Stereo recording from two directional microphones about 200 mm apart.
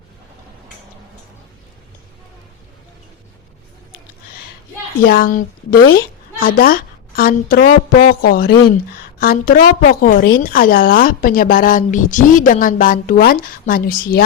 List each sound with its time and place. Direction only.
5.0 s a woman's voice: 45° left (ahead or behind)